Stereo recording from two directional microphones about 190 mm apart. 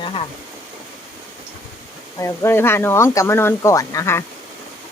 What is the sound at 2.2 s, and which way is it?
Speech, 15° left (ahead or behind).